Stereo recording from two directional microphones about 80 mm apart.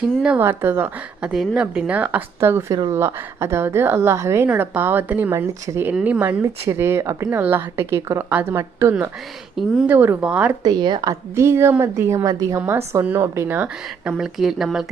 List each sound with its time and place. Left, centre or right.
0.3 s a woman's voice: right
1.2 s a woman's voice: centre
2.4 s a woman's voice: right
4.5 s a woman's voice: right
5.3 s a woman's voice: right
5.9 s a woman's voice: centre
6.4 s a woman's voice: right
7.3 s a woman's voice: right
10.2 s a woman's voice: centre
10.6 s a woman's voice: right
11.1 s a woman's voice: right
12.2 s a woman's voice: right
12.6 s a woman's voice: right
13.6 s speech: centre